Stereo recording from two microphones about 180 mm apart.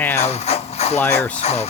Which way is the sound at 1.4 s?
35° left (ahead or behind).